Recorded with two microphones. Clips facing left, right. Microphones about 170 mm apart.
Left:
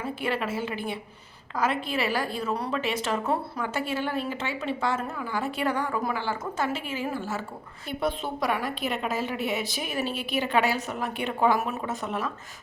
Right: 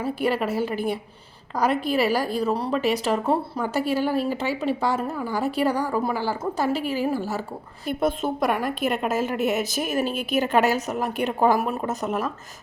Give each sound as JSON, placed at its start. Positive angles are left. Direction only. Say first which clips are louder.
{"t": 0.0, "sound": "a woman's voice", "louder": "right 5 dB", "side_deg": -40}
{"t": 7.9, "sound": "a woman's voice", "louder": "right 5 dB", "side_deg": -50}